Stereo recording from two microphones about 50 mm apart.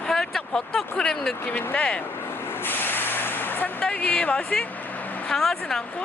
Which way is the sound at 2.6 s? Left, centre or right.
Left.